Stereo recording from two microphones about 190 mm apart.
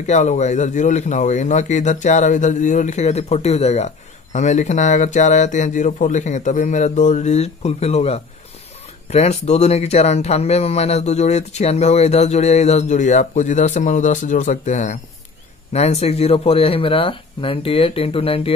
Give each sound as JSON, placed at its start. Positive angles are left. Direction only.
{"t": 0.0, "sound": "speech", "side_deg": 40}